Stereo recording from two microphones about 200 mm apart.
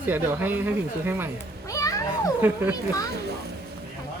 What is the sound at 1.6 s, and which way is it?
Children playing, 15° left (ahead or behind).